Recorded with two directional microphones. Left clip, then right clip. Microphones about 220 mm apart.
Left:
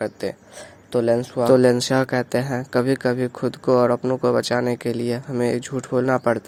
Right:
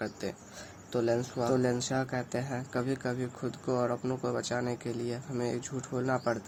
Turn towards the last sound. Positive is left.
turn(degrees=40)  # may be behind; listen again after turning